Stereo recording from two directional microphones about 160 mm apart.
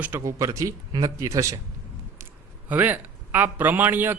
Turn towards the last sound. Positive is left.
turn(degrees=-10)  # may be behind; listen again after turning